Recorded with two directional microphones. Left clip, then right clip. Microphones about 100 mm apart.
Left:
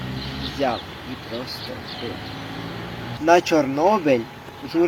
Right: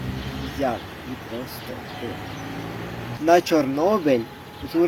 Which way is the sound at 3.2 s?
10° right (ahead or behind).